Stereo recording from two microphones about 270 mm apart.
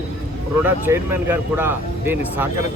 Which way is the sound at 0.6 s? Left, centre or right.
Centre.